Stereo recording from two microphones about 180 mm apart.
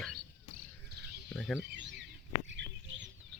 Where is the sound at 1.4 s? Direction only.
5° left (ahead or behind).